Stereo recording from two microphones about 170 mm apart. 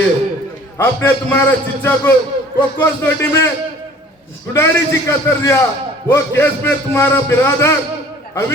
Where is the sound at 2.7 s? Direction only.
15° left (ahead or behind).